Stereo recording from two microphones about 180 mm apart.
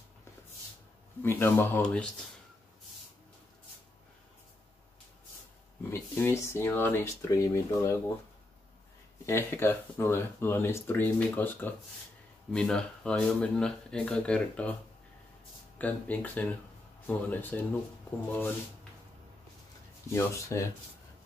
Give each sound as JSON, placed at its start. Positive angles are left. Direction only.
{"t": 1.2, "sound": "speech", "side_deg": 10}
{"t": 5.9, "sound": "speech", "side_deg": 15}
{"t": 9.2, "sound": "speech", "side_deg": 15}
{"t": 15.8, "sound": "speech", "side_deg": 10}
{"t": 20.1, "sound": "speech", "side_deg": 15}